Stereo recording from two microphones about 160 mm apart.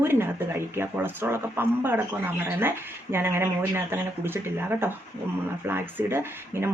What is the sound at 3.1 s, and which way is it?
Speech, 15° right (ahead or behind).